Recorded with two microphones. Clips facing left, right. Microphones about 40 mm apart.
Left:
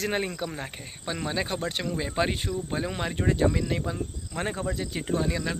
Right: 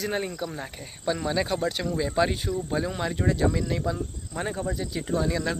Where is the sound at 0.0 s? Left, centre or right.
Left.